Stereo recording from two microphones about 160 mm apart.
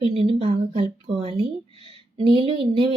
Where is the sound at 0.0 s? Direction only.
35° right (ahead or behind).